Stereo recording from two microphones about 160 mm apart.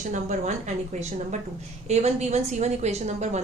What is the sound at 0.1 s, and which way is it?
Speech, 50° right (ahead or behind).